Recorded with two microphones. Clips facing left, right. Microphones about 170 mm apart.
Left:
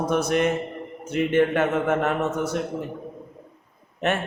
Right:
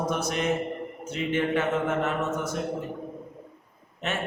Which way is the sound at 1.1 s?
55° left (ahead or behind).